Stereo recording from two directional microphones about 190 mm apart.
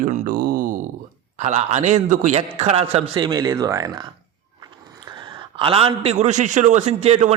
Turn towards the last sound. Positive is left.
turn(degrees=-35)  # may be behind; listen again after turning